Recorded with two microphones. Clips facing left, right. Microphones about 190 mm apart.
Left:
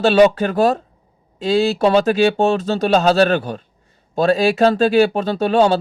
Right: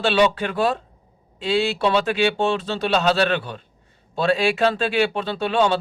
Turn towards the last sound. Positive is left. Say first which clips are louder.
# left 5 dB
turn(degrees=40)  # may be behind; listen again after turning